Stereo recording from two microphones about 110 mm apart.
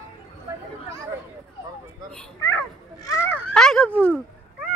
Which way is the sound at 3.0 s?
25° left (ahead or behind).